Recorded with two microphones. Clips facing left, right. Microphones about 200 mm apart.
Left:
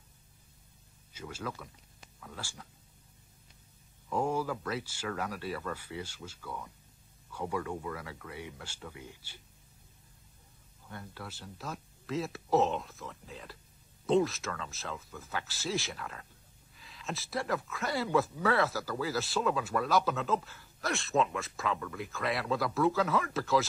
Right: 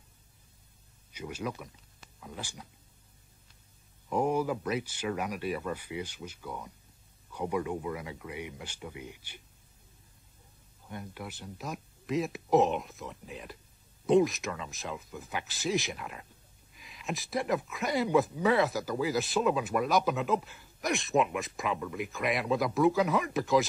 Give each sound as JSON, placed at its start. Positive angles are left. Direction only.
{"t": 1.1, "sound": "speech", "side_deg": -15}
{"t": 4.1, "sound": "speech", "side_deg": -15}
{"t": 10.9, "sound": "speech", "side_deg": -15}